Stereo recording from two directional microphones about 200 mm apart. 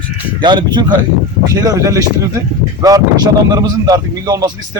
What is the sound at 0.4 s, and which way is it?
Speech, 20° right (ahead or behind).